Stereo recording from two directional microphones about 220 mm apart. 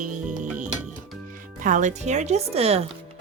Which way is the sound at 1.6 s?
35° right (ahead or behind).